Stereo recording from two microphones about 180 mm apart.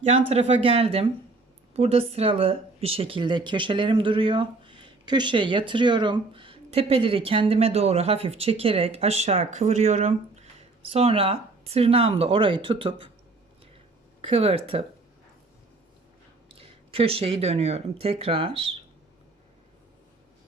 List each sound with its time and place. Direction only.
0.1 s speech: 35° right (ahead or behind)
14.2 s speech: 30° right (ahead or behind)
16.5 s speech: 30° right (ahead or behind)